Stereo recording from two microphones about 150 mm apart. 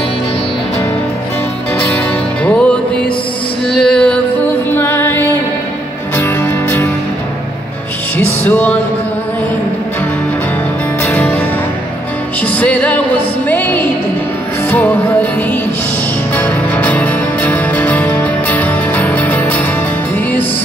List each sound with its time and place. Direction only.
2.4 s music: 10° left (ahead or behind)
8.2 s music: 10° left (ahead or behind)
11.1 s music: 10° left (ahead or behind)
16.3 s music: 10° left (ahead or behind)